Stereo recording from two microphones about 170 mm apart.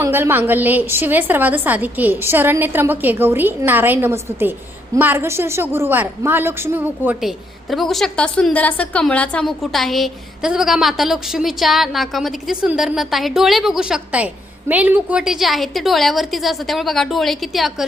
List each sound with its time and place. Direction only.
0.0 s a woman's voice: 15° right (ahead or behind)